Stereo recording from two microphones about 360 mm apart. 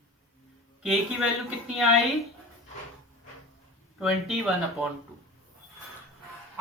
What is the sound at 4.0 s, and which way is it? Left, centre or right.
Speech, centre.